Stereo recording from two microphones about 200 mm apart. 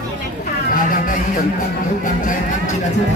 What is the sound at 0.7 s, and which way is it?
Music, 45° left (ahead or behind).